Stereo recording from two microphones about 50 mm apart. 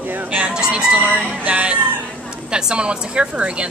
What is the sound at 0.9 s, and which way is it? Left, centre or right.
A woman's voice, right.